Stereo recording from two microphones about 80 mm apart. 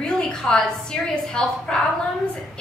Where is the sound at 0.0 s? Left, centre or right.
Centre.